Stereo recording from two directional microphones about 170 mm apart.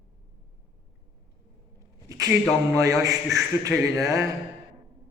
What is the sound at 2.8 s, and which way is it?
A man's voice, 20° right (ahead or behind).